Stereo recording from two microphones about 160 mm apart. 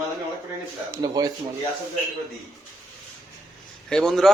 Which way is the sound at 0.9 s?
20° right (ahead or behind).